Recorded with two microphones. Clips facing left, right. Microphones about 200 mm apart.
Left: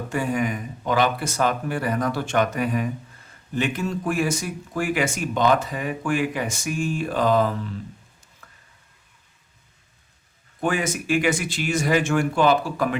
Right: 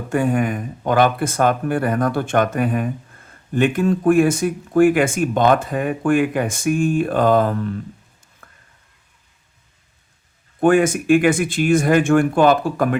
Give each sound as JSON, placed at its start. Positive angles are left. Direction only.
{"t": 0.1, "sound": "speech", "side_deg": -50}
{"t": 8.4, "sound": "a sound", "side_deg": -50}
{"t": 10.6, "sound": "speech", "side_deg": -50}